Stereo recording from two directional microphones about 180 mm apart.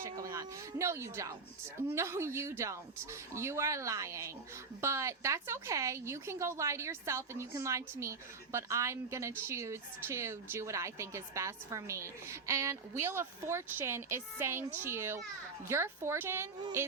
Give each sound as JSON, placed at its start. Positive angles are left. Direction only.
{"t": 0.0, "sound": "a woman's voice", "side_deg": -15}